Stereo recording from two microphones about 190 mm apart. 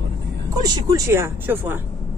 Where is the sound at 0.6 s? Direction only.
20° right (ahead or behind).